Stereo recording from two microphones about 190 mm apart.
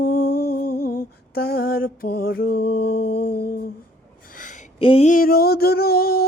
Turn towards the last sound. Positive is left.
turn(degrees=55)  # may be behind; listen again after turning